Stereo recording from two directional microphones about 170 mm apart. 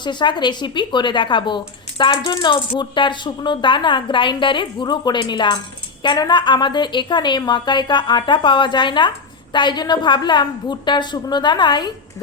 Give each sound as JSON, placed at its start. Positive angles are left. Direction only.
{"t": 0.0, "sound": "a woman's voice", "side_deg": 25}